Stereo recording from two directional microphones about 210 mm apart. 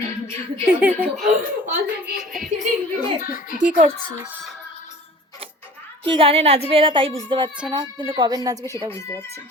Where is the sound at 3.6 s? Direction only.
30° right (ahead or behind).